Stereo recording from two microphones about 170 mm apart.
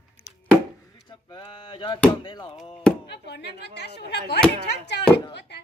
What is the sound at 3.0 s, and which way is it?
Speech, 80° left.